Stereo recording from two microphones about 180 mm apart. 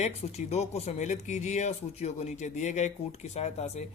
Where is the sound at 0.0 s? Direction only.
35° left (ahead or behind).